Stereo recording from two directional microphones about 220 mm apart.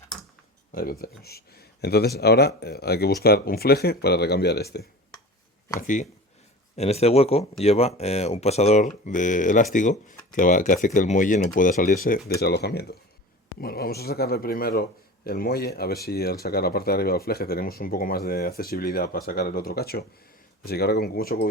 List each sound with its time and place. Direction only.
0.7 s speech: 40° left (ahead or behind)
5.8 s speech: 35° left (ahead or behind)